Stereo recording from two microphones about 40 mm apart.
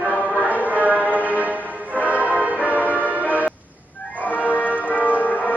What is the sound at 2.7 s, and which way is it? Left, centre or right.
Music, right.